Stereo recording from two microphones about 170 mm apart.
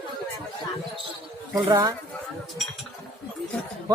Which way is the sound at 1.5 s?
20° right (ahead or behind).